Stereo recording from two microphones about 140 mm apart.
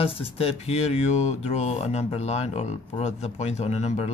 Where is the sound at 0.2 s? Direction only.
45° left (ahead or behind).